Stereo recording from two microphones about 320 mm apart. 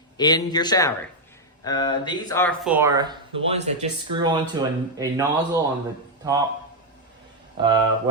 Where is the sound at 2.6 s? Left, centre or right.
Centre.